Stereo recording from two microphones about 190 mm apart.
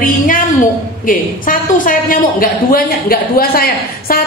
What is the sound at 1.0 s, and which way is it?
A woman's voice, 45° left (ahead or behind).